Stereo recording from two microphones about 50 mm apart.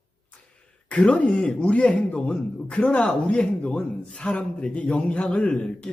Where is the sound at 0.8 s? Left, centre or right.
Left.